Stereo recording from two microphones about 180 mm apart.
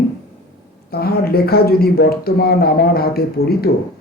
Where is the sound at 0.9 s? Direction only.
60° left (ahead or behind).